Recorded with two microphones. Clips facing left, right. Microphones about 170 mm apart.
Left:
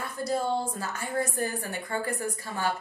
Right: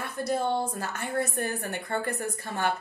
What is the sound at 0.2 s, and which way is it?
A woman's voice, 60° right (ahead or behind).